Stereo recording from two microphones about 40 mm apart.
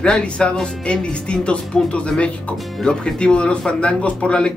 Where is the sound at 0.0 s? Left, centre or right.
Left.